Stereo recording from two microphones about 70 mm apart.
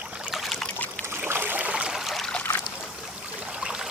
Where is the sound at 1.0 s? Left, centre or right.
Right.